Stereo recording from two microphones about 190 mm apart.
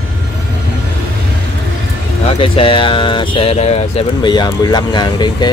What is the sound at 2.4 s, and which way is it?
Speech, 25° left (ahead or behind).